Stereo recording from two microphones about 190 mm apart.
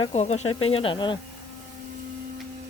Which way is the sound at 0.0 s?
30° left (ahead or behind).